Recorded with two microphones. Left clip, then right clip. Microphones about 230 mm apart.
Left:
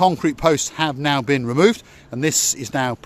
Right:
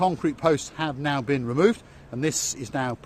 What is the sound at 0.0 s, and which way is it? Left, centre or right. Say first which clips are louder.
Speech: left 6 dB; left.